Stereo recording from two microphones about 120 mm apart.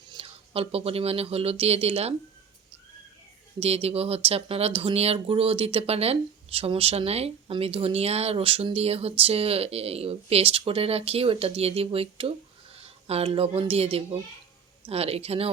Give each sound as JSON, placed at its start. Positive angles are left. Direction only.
{"t": 0.1, "sound": "speech", "side_deg": -50}
{"t": 3.6, "sound": "speech", "side_deg": -55}